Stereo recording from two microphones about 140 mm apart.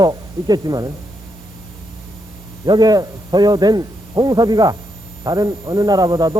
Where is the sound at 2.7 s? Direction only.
30° right (ahead or behind).